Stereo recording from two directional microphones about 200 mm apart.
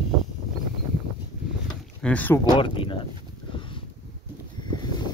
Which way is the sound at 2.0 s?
10° left (ahead or behind).